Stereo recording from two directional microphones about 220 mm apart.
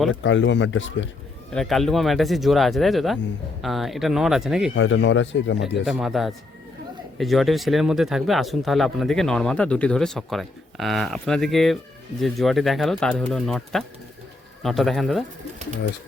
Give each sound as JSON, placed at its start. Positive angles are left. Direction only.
{"t": 0.1, "sound": "speech", "side_deg": 60}
{"t": 1.5, "sound": "speech", "side_deg": 0}
{"t": 4.7, "sound": "speech", "side_deg": 60}
{"t": 5.8, "sound": "speech", "side_deg": 0}